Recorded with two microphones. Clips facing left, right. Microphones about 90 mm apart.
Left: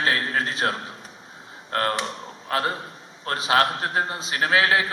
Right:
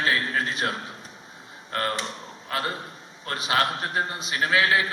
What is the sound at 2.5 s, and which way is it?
A man's voice, 30° left (ahead or behind).